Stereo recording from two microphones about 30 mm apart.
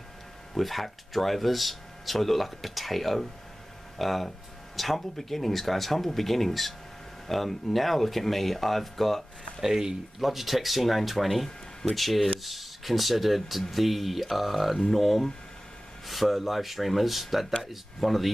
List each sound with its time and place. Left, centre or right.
0.6 s speech: centre
9.6 s speech: centre
10.2 s speech: centre